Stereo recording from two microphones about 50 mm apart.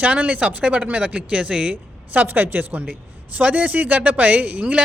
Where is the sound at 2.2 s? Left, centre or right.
Right.